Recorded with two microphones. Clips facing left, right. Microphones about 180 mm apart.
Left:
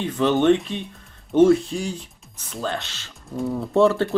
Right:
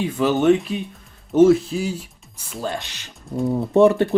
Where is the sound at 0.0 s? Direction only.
5° right (ahead or behind).